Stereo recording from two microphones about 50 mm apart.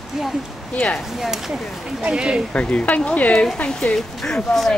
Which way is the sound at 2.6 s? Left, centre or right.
Left.